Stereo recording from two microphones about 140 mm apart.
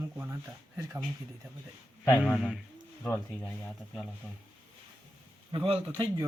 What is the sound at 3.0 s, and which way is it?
Speech, 15° left (ahead or behind).